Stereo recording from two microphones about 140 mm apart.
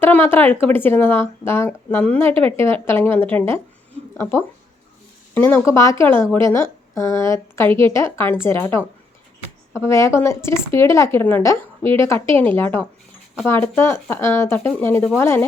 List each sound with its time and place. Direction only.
0.0 s speech: 15° left (ahead or behind)